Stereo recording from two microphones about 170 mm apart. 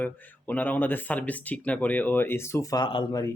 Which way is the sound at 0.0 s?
10° left (ahead or behind).